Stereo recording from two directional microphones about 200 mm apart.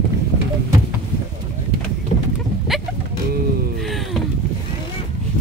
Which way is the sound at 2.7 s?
Centre (ahead or behind).